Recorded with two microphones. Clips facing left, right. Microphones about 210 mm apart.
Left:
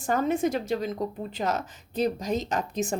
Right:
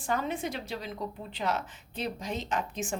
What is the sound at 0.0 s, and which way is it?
A woman's voice, 45° left (ahead or behind).